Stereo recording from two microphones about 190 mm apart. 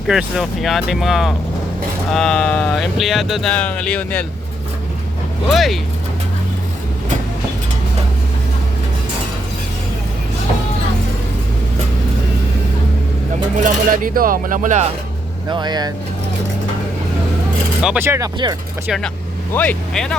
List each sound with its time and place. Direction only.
0.1 s speech: centre (ahead or behind)
5.5 s speech: centre (ahead or behind)
13.6 s speech: 45° right (ahead or behind)
15.4 s speech: 20° right (ahead or behind)
17.8 s speech: 10° right (ahead or behind)
18.9 s speech: centre (ahead or behind)